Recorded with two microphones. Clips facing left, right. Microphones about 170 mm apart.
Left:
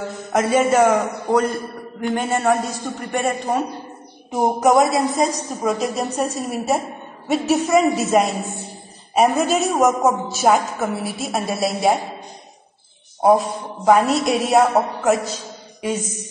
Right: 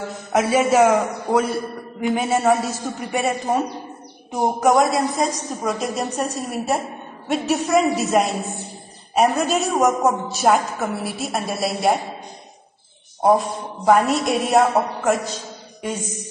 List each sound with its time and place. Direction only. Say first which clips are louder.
0.3 s a man's voice: even; 5° right (ahead or behind)
4.6 s a man's voice: left 1 dB; 5° left (ahead or behind)
13.2 s a man's voice: left 2 dB; 5° left (ahead or behind)